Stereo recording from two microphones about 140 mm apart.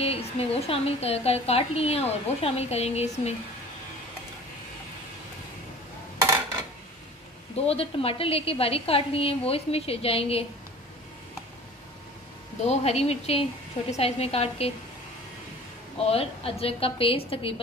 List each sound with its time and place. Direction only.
0.0 s a woman's voice: 45° left (ahead or behind)
7.5 s a woman's voice: 45° left (ahead or behind)
12.6 s a woman's voice: 50° left (ahead or behind)
16.1 s a woman's voice: 45° left (ahead or behind)